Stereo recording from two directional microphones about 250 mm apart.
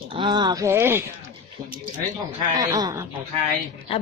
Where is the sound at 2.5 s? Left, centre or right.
Centre.